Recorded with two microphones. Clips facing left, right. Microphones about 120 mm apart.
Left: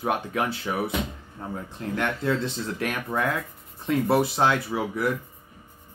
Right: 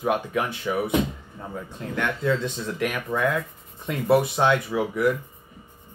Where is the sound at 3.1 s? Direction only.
25° left (ahead or behind).